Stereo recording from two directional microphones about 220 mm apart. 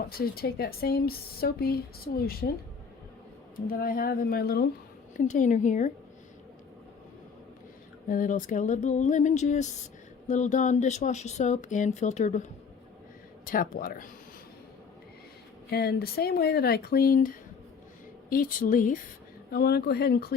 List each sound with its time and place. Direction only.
0.1 s speech: 45° left (ahead or behind)
3.7 s speech: 40° left (ahead or behind)
8.1 s speech: 35° left (ahead or behind)
15.7 s speech: 45° left (ahead or behind)